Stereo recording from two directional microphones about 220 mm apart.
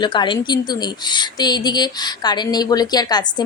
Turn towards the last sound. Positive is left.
turn(degrees=20)  # may be behind; listen again after turning